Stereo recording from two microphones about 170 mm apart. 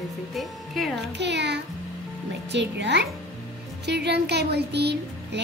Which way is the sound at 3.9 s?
80° right.